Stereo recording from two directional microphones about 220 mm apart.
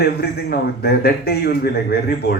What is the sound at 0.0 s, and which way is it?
A man's voice, 45° left (ahead or behind).